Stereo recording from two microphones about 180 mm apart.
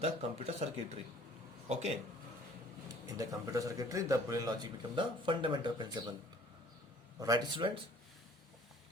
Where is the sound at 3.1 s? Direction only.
20° right (ahead or behind).